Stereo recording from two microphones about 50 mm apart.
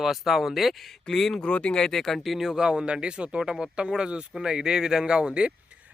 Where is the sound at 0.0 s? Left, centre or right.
Centre.